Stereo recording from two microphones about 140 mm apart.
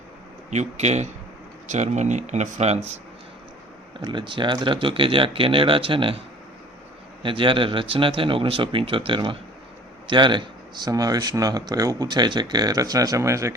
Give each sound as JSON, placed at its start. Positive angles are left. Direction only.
{"t": 0.5, "sound": "speech", "side_deg": -55}
{"t": 4.0, "sound": "speech", "side_deg": -35}
{"t": 7.2, "sound": "speech", "side_deg": -35}